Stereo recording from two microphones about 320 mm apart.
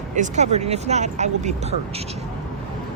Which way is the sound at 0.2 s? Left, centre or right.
Right.